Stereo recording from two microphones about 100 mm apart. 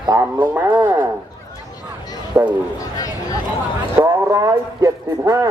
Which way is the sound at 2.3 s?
15° right (ahead or behind).